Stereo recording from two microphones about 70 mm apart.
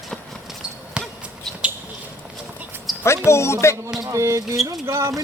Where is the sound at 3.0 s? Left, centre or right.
Left.